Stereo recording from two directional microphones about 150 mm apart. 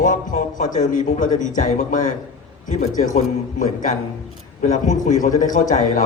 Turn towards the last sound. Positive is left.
turn(degrees=60)  # may be behind; listen again after turning